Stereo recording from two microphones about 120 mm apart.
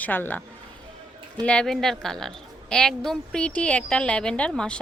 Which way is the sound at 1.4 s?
5° left (ahead or behind).